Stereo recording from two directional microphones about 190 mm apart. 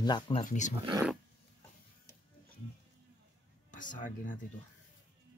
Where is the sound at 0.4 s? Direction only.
40° left (ahead or behind).